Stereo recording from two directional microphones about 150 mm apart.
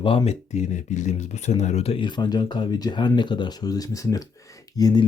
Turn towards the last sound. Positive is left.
turn(degrees=25)  # may be behind; listen again after turning